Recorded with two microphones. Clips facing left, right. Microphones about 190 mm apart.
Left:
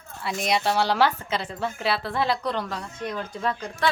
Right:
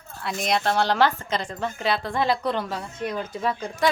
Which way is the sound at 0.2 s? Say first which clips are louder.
Even; centre (ahead or behind).